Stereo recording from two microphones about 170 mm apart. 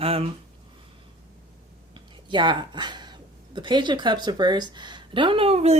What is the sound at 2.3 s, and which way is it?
Speech, 25° right (ahead or behind).